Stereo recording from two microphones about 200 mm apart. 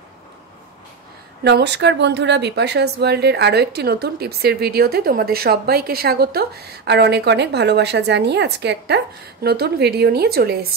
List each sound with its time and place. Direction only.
1.4 s speech: 60° right (ahead or behind)